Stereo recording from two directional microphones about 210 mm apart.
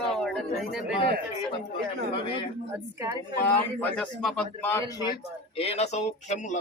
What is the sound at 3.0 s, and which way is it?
Speech, 20° right (ahead or behind).